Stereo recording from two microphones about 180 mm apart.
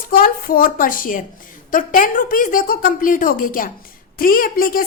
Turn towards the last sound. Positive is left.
turn(degrees=50)  # may be behind; listen again after turning